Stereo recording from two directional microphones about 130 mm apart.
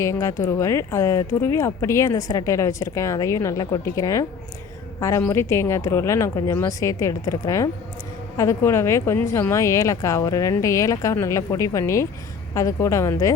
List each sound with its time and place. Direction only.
0.0 s a woman's voice: 25° left (ahead or behind)